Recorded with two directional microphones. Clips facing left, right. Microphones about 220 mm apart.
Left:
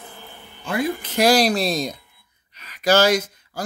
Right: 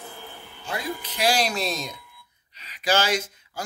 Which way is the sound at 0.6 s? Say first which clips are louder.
Left 8 dB; 50° left (ahead or behind).